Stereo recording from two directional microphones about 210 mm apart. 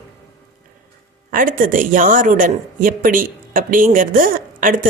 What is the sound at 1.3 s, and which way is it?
A woman's voice, 40° right (ahead or behind).